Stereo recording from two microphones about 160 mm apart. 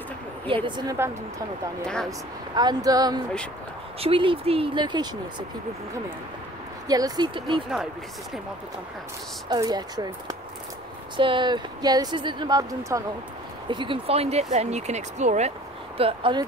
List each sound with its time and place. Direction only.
0.7 s speech: 25° right (ahead or behind)
2.0 s speech: 25° right (ahead or behind)
6.9 s speech: 25° right (ahead or behind)
9.5 s speech: 25° right (ahead or behind); by 15.5 s 45° right (ahead or behind)
16.0 s speech: 35° right (ahead or behind)